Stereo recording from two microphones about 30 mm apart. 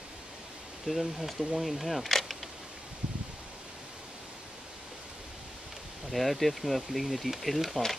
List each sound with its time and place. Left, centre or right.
0.8 s speech: centre
6.1 s speech: centre